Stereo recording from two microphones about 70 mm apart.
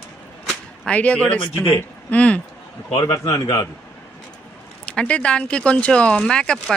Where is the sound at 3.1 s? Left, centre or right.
Left.